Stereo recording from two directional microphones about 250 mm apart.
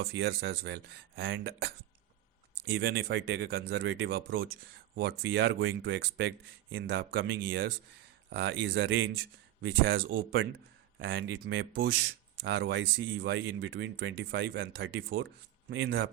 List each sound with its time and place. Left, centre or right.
0.1 s speech: right
2.7 s speech: right
11.0 s speech: right